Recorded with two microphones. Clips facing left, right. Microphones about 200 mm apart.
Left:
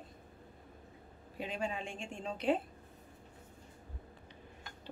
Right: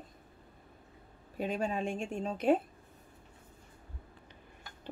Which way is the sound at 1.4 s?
45° right (ahead or behind).